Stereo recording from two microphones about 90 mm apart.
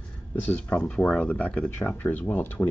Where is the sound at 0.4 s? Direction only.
20° left (ahead or behind).